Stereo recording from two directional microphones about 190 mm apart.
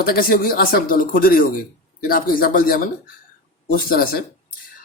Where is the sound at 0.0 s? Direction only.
50° left (ahead or behind).